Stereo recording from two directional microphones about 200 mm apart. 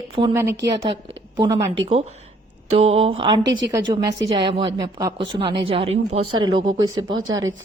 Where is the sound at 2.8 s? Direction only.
30° right (ahead or behind).